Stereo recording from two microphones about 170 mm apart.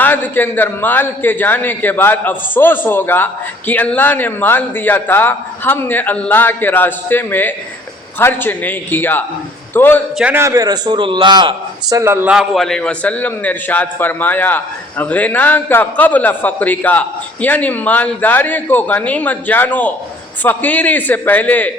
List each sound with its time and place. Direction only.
0.0 s a man's voice: 10° left (ahead or behind)
10.2 s a man's voice: 10° right (ahead or behind); by 21.7 s 10° left (ahead or behind)